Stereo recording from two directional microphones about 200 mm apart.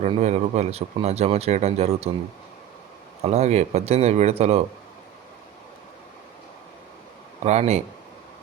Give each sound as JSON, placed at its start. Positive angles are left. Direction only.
{"t": 0.0, "sound": "speech", "side_deg": -35}
{"t": 3.2, "sound": "speech", "side_deg": -35}
{"t": 7.4, "sound": "speech", "side_deg": -35}